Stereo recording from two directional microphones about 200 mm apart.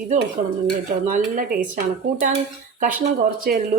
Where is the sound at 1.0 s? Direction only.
40° right (ahead or behind).